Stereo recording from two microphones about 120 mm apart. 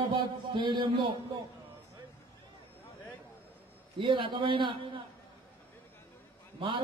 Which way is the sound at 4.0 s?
45° right (ahead or behind).